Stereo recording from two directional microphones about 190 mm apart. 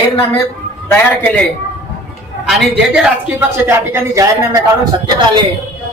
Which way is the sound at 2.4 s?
Centre (ahead or behind).